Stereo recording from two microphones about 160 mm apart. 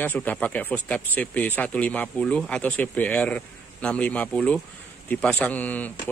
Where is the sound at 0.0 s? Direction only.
10° left (ahead or behind).